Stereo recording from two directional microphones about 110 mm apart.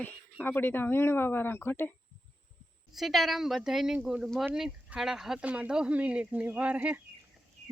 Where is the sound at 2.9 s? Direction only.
Centre (ahead or behind).